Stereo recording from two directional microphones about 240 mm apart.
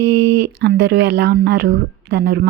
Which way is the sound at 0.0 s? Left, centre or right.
Right.